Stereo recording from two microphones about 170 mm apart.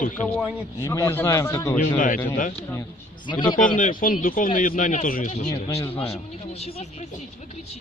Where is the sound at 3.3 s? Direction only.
25° left (ahead or behind).